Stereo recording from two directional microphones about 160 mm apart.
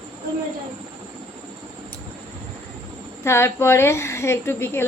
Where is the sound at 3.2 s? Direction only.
15° left (ahead or behind).